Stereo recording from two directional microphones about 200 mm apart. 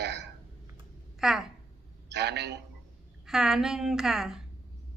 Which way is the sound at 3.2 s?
Centre (ahead or behind).